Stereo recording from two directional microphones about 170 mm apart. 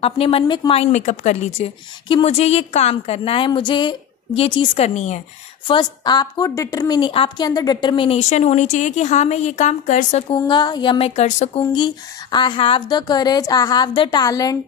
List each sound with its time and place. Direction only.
0.0 s a woman's voice: 35° left (ahead or behind)
5.7 s a woman's voice: 25° left (ahead or behind); by 10.2 s 45° left (ahead or behind)
10.3 s a woman's voice: 25° left (ahead or behind); by 11.6 s 45° left (ahead or behind)
11.7 s speech: 25° left (ahead or behind)